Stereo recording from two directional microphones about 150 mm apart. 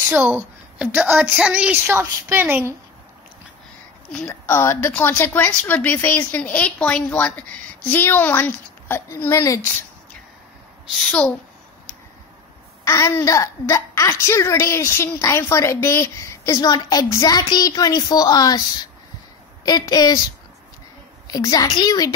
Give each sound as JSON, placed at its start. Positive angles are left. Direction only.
{"t": 0.0, "sound": "a woman's voice", "side_deg": -10}
{"t": 4.3, "sound": "a woman's voice", "side_deg": 20}
{"t": 11.0, "sound": "a woman's voice", "side_deg": 5}
{"t": 12.8, "sound": "a woman's voice", "side_deg": 20}
{"t": 21.3, "sound": "a woman's voice", "side_deg": 25}